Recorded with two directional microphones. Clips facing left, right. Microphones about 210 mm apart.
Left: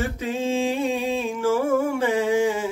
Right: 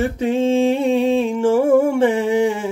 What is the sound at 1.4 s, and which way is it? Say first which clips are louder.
Music: right 6 dB; 30° right (ahead or behind).